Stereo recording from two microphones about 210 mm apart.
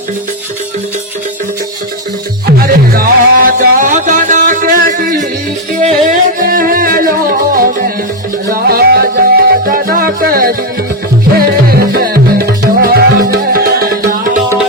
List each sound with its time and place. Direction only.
2.5 s music: 45° right (ahead or behind)